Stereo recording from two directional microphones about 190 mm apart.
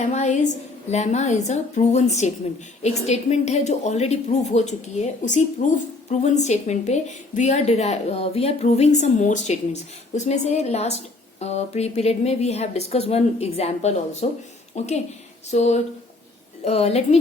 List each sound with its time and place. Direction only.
0.0 s a woman's voice: 35° left (ahead or behind)